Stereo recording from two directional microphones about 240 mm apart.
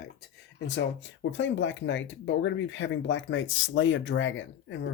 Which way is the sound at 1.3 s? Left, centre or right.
Left.